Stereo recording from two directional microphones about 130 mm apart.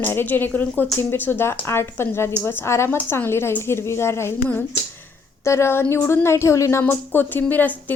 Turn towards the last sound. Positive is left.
turn(degrees=15)  # may be behind; listen again after turning